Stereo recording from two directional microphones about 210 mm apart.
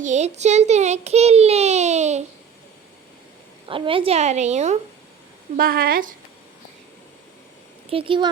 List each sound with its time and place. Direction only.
0.0 s a child's voice: 35° right (ahead or behind)
3.7 s a child's voice: 25° right (ahead or behind)
5.5 s speech: 45° right (ahead or behind)
7.9 s speech: 25° right (ahead or behind)